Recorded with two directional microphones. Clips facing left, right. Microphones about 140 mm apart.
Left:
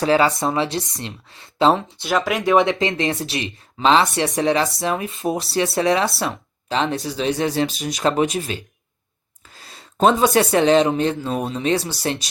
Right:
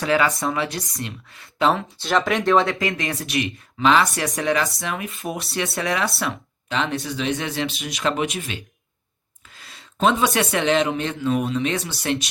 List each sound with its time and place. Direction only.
0.0 s speech: 30° left (ahead or behind)
2.0 s speech: 5° left (ahead or behind)
2.6 s speech: 20° left (ahead or behind)